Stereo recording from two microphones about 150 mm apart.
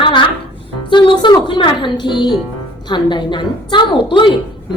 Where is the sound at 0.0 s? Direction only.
35° left (ahead or behind).